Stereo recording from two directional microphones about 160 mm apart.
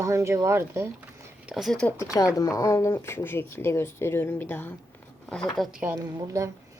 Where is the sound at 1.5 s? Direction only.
Centre (ahead or behind).